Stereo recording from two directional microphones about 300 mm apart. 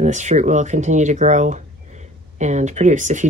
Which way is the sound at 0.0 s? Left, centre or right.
Right.